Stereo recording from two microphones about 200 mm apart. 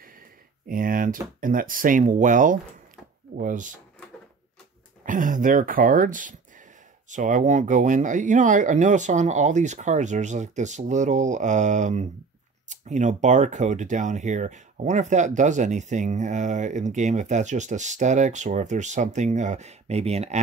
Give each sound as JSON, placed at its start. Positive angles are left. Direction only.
{"t": 0.7, "sound": "speech", "side_deg": -45}
{"t": 5.0, "sound": "speech", "side_deg": -40}